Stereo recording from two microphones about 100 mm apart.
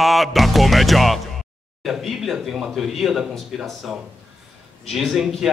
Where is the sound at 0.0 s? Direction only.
Centre (ahead or behind).